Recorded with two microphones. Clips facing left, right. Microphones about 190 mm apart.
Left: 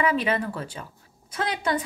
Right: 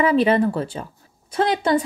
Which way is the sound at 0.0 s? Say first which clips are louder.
Right 8 dB; 30° right (ahead or behind).